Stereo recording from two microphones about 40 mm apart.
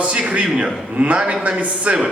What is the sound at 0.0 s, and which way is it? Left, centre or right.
A man's voice, right.